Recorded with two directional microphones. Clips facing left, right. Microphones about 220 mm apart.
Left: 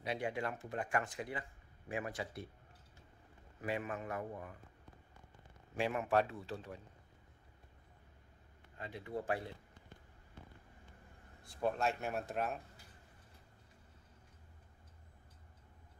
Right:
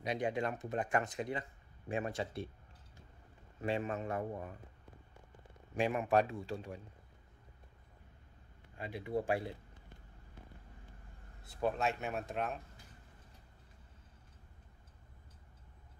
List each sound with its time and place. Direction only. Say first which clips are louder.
0.0 s speech: right 3 dB; 20° right (ahead or behind)
3.6 s speech: right 4 dB; 25° right (ahead or behind)
5.8 s a man's voice: right 2 dB; 15° right (ahead or behind)
8.7 s a man's voice: right 5 dB; 15° right (ahead or behind)
11.6 s speech: right 1 dB; centre (ahead or behind)